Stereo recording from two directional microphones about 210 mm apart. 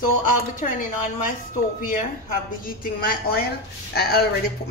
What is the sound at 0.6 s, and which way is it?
Speech, 40° left (ahead or behind).